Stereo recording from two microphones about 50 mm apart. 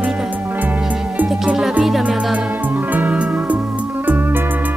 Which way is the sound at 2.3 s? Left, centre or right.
Right.